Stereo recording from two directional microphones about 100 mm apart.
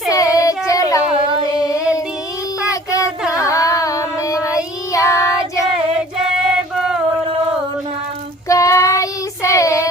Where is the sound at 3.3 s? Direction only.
35° left (ahead or behind).